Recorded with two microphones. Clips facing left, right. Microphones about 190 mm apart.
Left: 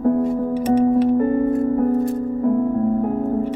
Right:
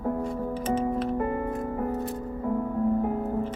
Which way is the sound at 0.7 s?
40° left (ahead or behind).